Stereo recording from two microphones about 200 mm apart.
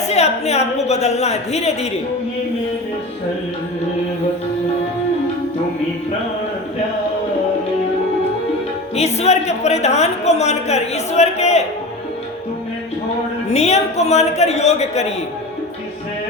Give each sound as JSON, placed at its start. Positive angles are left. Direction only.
{"t": 0.1, "sound": "a woman's voice", "side_deg": 35}
{"t": 9.0, "sound": "a woman's voice", "side_deg": 35}
{"t": 13.5, "sound": "a woman's voice", "side_deg": 35}